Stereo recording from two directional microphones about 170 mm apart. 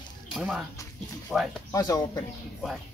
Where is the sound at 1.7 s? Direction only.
20° left (ahead or behind).